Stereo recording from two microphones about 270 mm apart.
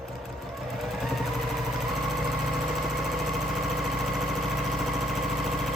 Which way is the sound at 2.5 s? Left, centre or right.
Centre.